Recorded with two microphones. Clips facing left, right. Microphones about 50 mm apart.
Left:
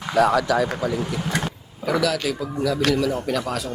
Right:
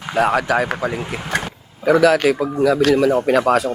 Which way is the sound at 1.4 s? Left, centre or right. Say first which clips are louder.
Right 7 dB; right.